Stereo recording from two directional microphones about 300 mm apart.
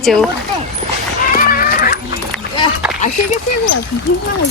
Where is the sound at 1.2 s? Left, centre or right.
Left.